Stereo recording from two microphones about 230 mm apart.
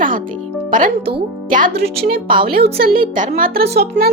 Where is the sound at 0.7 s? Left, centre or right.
Right.